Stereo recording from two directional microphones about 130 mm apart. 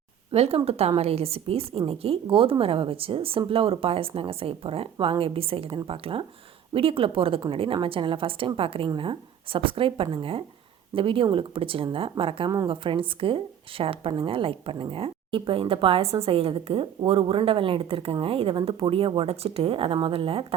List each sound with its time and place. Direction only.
0.3 s a woman's voice: 50° right (ahead or behind)